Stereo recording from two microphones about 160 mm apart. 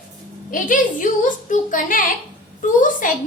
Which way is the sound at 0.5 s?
60° left (ahead or behind).